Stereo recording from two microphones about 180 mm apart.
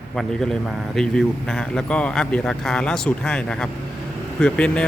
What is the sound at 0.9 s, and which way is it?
Speech, 5° left (ahead or behind).